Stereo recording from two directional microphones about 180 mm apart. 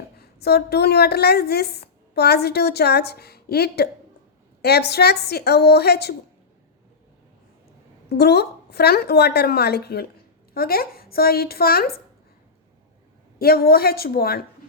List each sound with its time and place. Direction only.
0.2 s a woman's voice: 60° left (ahead or behind)
8.1 s a woman's voice: 65° left (ahead or behind)
13.4 s a woman's voice: 60° left (ahead or behind)